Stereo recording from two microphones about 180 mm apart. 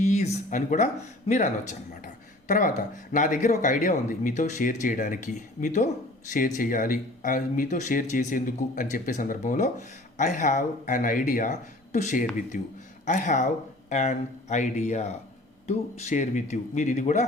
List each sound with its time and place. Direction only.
0.0 s speech: 45° left (ahead or behind)